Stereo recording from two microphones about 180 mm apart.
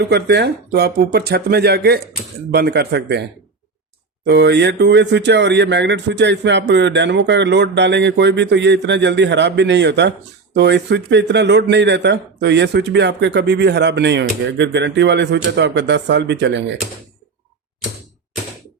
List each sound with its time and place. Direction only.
0.0 s speech: 65° right (ahead or behind)
4.3 s speech: 70° right (ahead or behind)